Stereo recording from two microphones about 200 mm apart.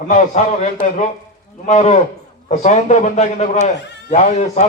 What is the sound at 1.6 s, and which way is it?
A man's voice, 35° left (ahead or behind).